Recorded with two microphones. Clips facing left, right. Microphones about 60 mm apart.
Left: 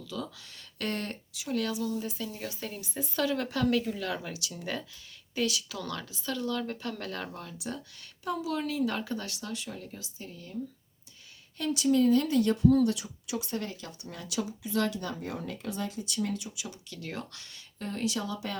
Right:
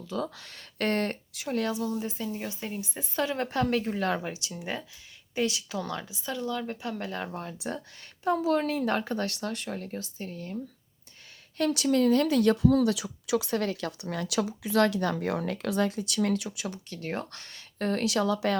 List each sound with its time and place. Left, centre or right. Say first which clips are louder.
0.0 s speech: right 5 dB; right
0.3 s speech: right 7 dB; right
4.5 s speech: right 1 dB; centre
7.3 s speech: right 4 dB; right
11.5 s speech: right 1 dB; right